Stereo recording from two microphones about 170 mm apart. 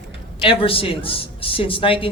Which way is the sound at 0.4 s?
30° left (ahead or behind).